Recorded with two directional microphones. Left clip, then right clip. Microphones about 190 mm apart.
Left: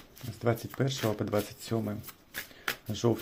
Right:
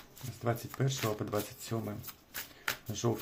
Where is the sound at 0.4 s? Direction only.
25° left (ahead or behind).